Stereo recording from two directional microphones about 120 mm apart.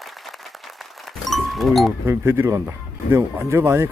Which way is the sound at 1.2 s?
Centre (ahead or behind).